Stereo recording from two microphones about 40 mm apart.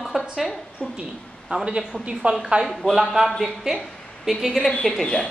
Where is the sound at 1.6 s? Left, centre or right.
Right.